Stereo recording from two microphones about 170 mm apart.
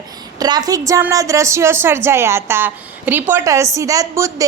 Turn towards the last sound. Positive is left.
turn(degrees=-20)  # may be behind; listen again after turning